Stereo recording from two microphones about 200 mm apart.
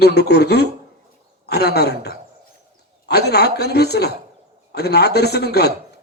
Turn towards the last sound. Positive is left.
turn(degrees=55)  # may be behind; listen again after turning